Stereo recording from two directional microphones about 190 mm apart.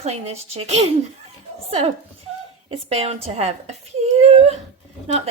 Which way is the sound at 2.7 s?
30° right (ahead or behind).